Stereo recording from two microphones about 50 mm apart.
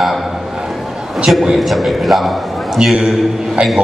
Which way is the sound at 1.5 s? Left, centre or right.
Centre.